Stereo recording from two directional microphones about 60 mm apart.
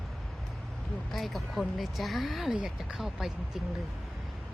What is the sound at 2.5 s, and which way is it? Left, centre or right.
Speech, centre.